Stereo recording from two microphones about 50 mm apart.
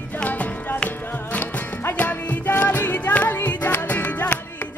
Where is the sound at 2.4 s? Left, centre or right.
Left.